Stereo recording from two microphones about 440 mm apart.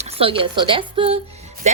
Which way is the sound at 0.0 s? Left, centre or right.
Centre.